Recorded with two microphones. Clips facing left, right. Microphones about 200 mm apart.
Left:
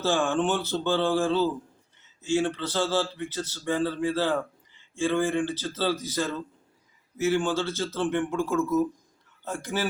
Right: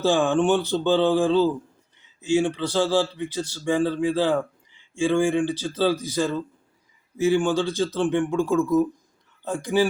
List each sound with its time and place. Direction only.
0.0 s a man's voice: 15° right (ahead or behind)